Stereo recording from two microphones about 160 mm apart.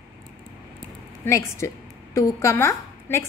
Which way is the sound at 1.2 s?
15° left (ahead or behind).